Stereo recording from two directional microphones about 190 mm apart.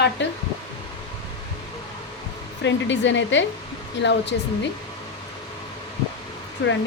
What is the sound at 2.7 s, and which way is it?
Speech, 70° left (ahead or behind).